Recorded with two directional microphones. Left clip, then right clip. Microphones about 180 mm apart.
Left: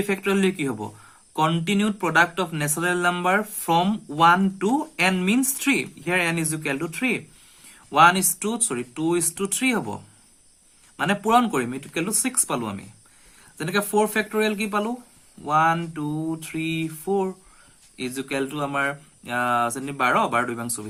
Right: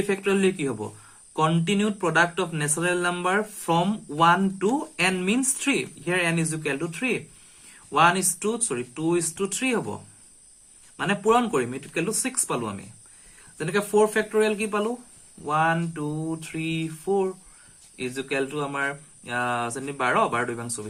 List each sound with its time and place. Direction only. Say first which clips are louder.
0.0 s speech: even; 40° left (ahead or behind)